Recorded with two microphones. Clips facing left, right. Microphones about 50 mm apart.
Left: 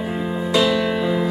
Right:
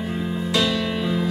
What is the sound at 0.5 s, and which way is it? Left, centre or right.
Music, centre.